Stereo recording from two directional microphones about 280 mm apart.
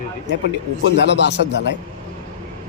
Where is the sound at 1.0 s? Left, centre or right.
Left.